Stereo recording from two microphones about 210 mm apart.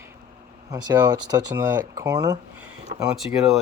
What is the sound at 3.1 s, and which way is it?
Speech, centre (ahead or behind).